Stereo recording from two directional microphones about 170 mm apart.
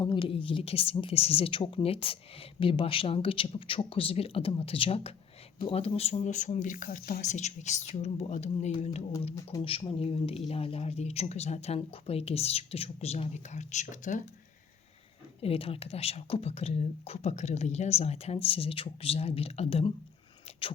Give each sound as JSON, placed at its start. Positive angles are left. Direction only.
{"t": 0.0, "sound": "speech", "side_deg": 30}
{"t": 15.4, "sound": "speech", "side_deg": 35}